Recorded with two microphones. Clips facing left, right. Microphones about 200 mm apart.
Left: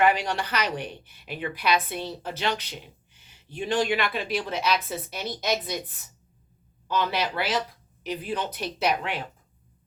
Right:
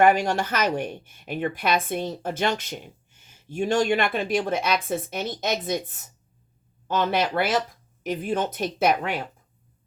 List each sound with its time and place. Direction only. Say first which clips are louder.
0.0 s a woman's voice: right 4 dB; 45° right (ahead or behind)
6.8 s a woman's voice: right 3 dB; 50° right (ahead or behind)